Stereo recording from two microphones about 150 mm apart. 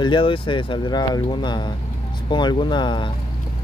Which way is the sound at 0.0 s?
35° left (ahead or behind).